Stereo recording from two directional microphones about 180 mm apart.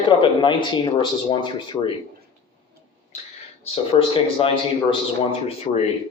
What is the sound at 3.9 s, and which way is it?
Speech, 30° left (ahead or behind).